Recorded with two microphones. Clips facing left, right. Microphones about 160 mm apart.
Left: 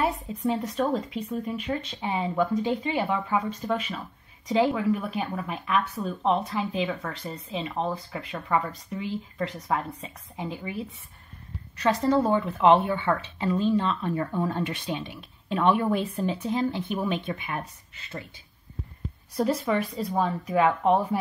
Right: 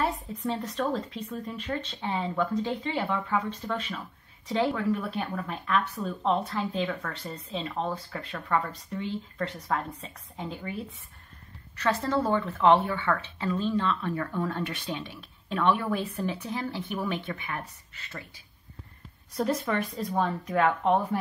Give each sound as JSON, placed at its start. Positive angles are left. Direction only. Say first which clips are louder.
{"t": 0.0, "sound": "a woman's voice", "louder": "left 3 dB", "side_deg": 10}
{"t": 11.8, "sound": "a woman's voice", "louder": "left 4 dB", "side_deg": 15}
{"t": 19.3, "sound": "speech", "louder": "left 3 dB", "side_deg": 5}